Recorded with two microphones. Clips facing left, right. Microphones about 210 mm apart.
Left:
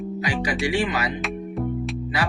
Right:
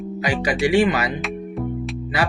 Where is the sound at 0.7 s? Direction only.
60° right (ahead or behind).